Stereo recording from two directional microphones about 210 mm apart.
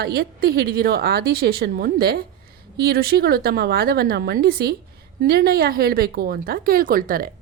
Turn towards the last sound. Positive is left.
turn(degrees=-45)  # may be behind; listen again after turning